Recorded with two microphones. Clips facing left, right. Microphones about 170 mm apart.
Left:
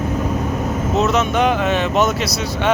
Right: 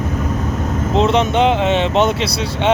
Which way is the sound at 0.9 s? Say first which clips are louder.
Right 3 dB; 30° right (ahead or behind).